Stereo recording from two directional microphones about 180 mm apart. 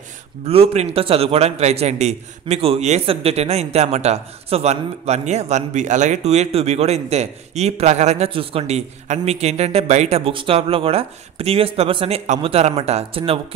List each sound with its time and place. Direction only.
0.5 s a man's voice: 35° right (ahead or behind)